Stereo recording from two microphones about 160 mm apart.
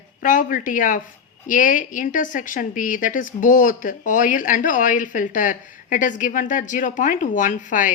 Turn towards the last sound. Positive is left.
turn(degrees=55)  # may be behind; listen again after turning